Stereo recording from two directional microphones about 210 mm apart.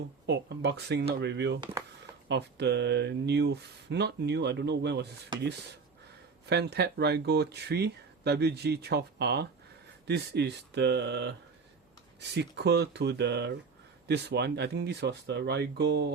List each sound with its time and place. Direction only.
0.3 s speech: 50° right (ahead or behind)
6.4 s speech: 55° right (ahead or behind)